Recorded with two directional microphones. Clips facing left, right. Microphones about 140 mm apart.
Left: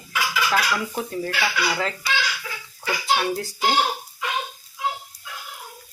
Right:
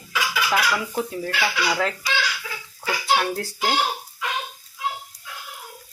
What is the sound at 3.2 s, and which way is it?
Speech, centre (ahead or behind).